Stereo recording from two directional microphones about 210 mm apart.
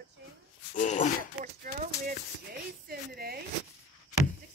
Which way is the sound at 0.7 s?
35° left (ahead or behind).